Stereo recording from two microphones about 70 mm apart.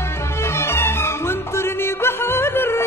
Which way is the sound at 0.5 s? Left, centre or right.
Left.